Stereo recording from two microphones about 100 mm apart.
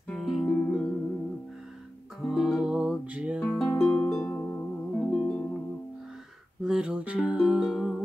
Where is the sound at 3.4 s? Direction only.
5° left (ahead or behind).